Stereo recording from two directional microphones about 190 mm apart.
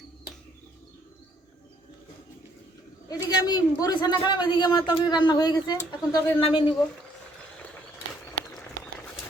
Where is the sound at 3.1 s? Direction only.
20° left (ahead or behind).